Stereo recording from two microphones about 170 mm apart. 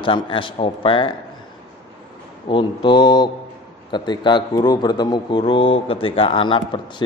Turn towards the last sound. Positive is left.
turn(degrees=30)  # may be behind; listen again after turning